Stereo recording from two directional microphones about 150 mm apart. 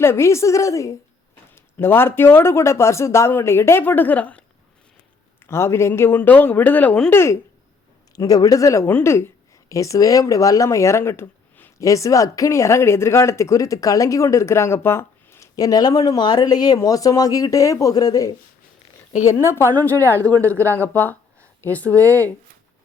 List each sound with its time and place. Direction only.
0.0 s speech: 15° left (ahead or behind)
5.5 s speech: 15° left (ahead or behind)
19.3 s speech: 20° left (ahead or behind)